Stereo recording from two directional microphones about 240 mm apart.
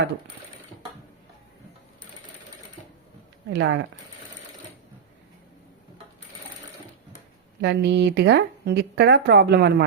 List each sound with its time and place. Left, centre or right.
3.5 s speech: right
7.6 s speech: right